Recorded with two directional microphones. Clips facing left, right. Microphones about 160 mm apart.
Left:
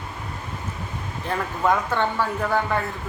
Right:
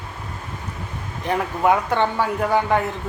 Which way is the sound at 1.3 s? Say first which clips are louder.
Right 4 dB; 15° right (ahead or behind).